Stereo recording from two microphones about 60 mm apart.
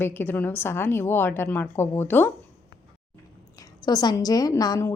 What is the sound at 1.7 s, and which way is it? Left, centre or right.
Speech, left.